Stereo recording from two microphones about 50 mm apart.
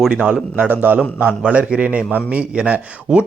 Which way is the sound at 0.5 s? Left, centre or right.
Right.